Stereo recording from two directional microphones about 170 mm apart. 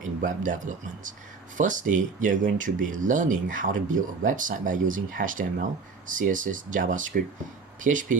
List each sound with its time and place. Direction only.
0.0 s speech: 50° right (ahead or behind)